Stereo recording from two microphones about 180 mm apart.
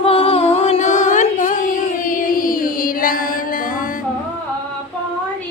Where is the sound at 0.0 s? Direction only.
30° left (ahead or behind); by 3.8 s 50° left (ahead or behind).